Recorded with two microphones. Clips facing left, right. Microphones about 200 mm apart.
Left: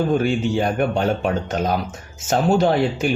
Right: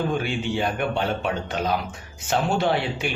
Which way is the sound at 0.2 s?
45° left (ahead or behind).